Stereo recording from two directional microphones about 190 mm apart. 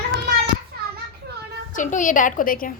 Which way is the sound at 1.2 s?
60° right (ahead or behind).